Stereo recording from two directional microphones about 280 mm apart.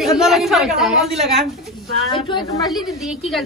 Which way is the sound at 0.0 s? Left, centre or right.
Centre.